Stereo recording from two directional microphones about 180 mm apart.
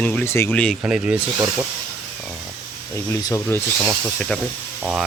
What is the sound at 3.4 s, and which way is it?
Speech, 5° left (ahead or behind).